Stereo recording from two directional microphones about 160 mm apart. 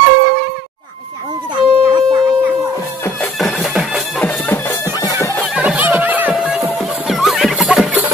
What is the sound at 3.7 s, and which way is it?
Music, 10° left (ahead or behind).